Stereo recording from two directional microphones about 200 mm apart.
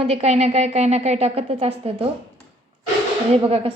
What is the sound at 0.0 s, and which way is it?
A woman's voice, 30° right (ahead or behind).